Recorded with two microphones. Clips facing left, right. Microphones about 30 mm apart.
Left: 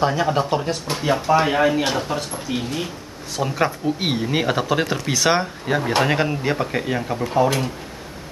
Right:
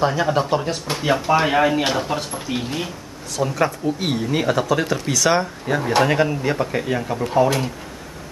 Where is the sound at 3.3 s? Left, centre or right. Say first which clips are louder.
Right 1 dB; centre.